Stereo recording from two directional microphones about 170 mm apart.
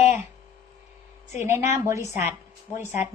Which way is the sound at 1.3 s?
15° right (ahead or behind).